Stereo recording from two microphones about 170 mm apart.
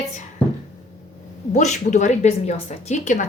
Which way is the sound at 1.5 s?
45° left (ahead or behind).